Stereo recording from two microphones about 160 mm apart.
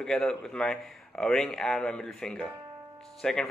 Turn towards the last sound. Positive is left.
turn(degrees=5)  # may be behind; listen again after turning